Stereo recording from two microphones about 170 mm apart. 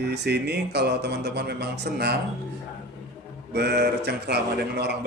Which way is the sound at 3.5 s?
75° right (ahead or behind).